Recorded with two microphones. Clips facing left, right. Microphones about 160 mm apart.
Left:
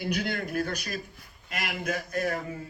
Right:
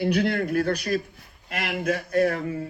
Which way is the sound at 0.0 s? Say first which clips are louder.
Right 7 dB; 35° right (ahead or behind).